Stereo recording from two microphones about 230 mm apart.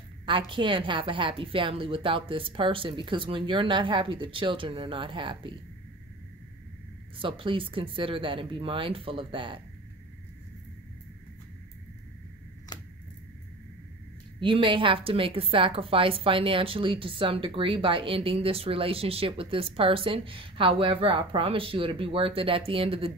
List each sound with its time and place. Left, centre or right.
0.2 s a woman's voice: right
7.2 s a woman's voice: right
12.7 s a sound: centre
14.4 s a woman's voice: right